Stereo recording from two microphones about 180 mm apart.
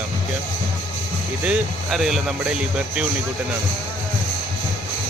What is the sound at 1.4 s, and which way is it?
Speech, 5° right (ahead or behind).